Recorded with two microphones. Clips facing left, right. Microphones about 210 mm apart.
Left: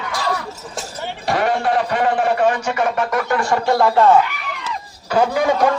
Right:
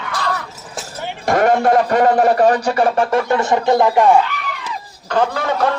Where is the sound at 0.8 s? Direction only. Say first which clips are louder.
Even; centre (ahead or behind).